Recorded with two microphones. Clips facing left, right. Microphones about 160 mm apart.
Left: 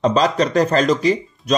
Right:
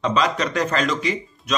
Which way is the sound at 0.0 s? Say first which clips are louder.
Left 5 dB; 35° left (ahead or behind).